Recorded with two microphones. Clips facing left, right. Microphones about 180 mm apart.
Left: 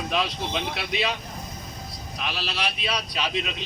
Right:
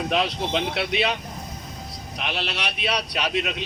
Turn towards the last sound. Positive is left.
turn(degrees=-65)  # may be behind; listen again after turning